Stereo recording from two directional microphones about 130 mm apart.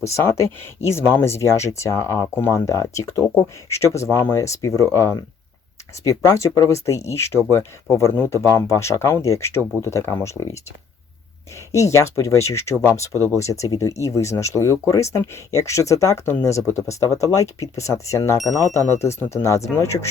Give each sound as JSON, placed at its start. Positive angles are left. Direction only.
{"t": 0.1, "sound": "speech", "side_deg": 20}
{"t": 11.7, "sound": "speech", "side_deg": 20}